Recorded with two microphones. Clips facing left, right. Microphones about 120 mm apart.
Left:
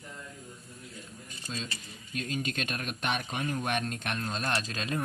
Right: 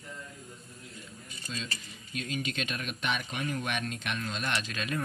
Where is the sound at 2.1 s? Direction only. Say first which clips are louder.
Left 1 dB; 45° left (ahead or behind).